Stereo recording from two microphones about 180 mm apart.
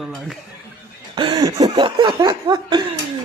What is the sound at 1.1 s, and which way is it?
Cough, 25° right (ahead or behind).